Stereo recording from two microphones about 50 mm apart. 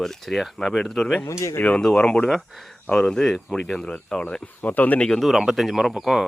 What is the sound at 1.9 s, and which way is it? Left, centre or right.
Speech, centre.